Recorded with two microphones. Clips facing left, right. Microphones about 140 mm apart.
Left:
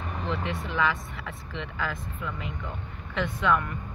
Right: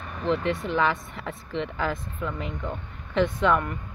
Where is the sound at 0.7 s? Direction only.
30° right (ahead or behind).